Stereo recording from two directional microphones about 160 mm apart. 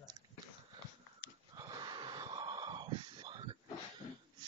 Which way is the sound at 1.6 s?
30° right (ahead or behind).